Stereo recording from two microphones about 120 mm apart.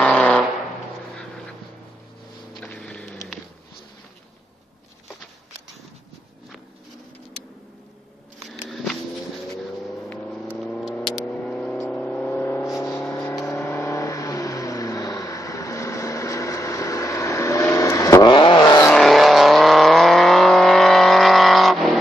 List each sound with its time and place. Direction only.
0.0 s vehicle: 5° left (ahead or behind)
2.6 s vehicle: 10° left (ahead or behind)
8.5 s a sound: centre (ahead or behind)
10.0 s vehicle: 10° left (ahead or behind); by 18.2 s 25° left (ahead or behind)
18.2 s vehicle: 40° left (ahead or behind)
18.9 s vehicle: centre (ahead or behind)